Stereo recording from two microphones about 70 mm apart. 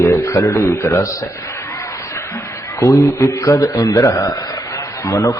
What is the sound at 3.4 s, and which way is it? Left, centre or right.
A man's voice, left.